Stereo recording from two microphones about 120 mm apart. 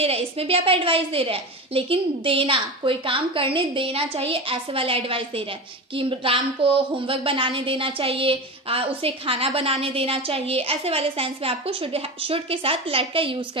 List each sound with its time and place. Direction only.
0.0 s a woman's voice: 55° right (ahead or behind)